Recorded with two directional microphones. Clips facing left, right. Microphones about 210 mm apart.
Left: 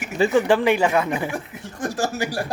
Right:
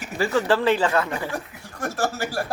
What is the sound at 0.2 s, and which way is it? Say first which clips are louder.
Speech: left 4 dB; 15° left (ahead or behind).